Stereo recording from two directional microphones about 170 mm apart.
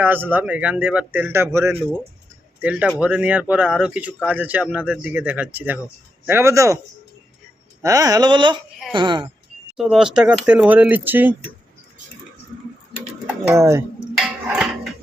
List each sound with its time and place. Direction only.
0.0 s a man's voice: 10° right (ahead or behind)
7.8 s speech: 20° right (ahead or behind)
9.7 s a man's voice: 5° right (ahead or behind)
13.2 s speech: 10° right (ahead or behind)
14.2 s music: 5° right (ahead or behind)